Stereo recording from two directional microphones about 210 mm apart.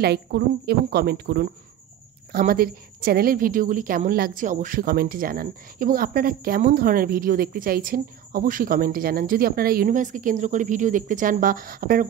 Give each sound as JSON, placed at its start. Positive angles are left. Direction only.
{"t": 0.0, "sound": "a woman's voice", "side_deg": -50}